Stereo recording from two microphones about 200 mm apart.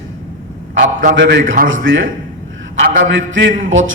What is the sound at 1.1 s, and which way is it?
Speech, 70° right (ahead or behind).